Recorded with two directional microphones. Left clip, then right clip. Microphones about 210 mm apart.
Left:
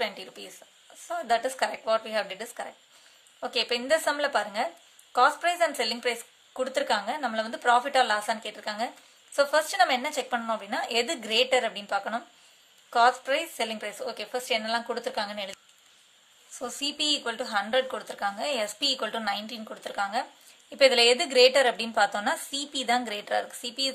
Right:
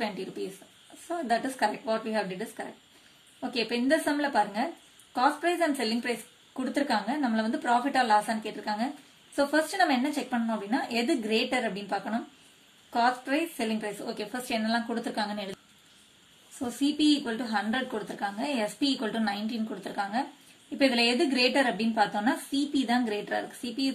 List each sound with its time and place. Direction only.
0.0 s a woman's voice: 40° left (ahead or behind)
16.8 s a woman's voice: 40° left (ahead or behind)